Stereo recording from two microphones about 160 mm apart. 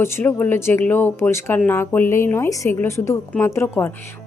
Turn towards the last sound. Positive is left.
turn(degrees=15)  # may be behind; listen again after turning